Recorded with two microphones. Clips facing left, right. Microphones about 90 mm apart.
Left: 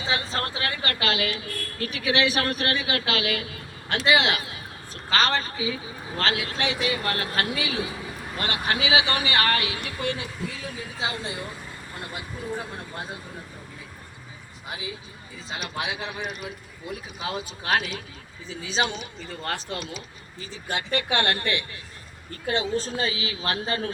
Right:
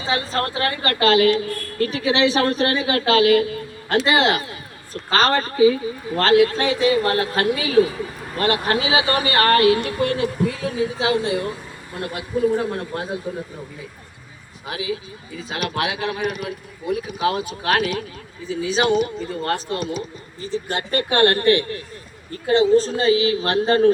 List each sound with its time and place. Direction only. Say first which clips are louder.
0.0 s a woman's voice: right 5 dB; 40° right (ahead or behind); by 10.7 s 55° right (ahead or behind)
11.0 s speech: right 8 dB; 90° right
15.4 s a woman's voice: right 8 dB; 55° right (ahead or behind); by 23.9 s 35° right (ahead or behind)